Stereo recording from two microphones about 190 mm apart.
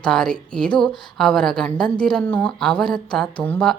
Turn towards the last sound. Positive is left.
turn(degrees=5)  # may be behind; listen again after turning